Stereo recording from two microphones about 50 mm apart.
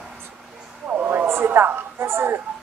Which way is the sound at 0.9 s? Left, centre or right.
Right.